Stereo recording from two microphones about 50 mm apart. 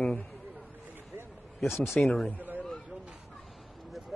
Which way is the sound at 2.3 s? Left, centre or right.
Right.